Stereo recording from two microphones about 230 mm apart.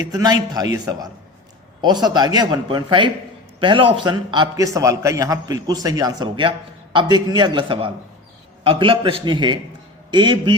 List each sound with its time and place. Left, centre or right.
0.1 s a man's voice: centre